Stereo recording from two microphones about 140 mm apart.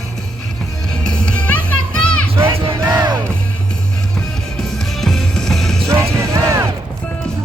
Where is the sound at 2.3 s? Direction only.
20° right (ahead or behind).